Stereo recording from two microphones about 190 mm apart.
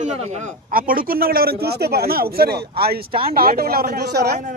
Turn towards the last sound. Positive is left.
turn(degrees=-55)  # may be behind; listen again after turning